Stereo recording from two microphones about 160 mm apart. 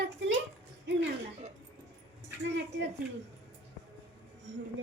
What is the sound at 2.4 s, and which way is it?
Speech, 90° right.